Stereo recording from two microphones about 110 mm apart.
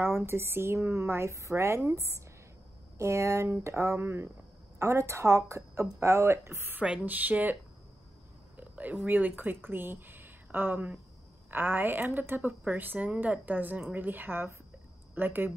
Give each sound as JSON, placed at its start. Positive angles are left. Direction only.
{"t": 0.0, "sound": "speech", "side_deg": -20}
{"t": 6.8, "sound": "a woman's voice", "side_deg": -10}
{"t": 8.5, "sound": "a woman's voice", "side_deg": -15}